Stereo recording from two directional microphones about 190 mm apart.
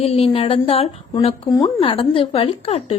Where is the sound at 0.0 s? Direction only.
30° left (ahead or behind).